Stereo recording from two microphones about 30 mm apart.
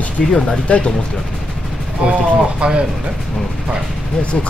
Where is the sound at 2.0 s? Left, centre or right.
Right.